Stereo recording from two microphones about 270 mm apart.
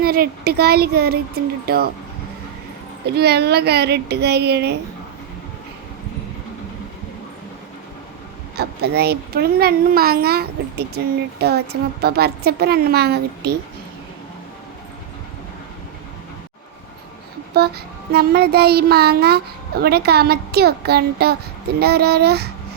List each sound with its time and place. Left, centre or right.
0.0 s a child's voice: right
3.2 s a child's voice: right
8.5 s a child's voice: right
17.5 s a child's voice: right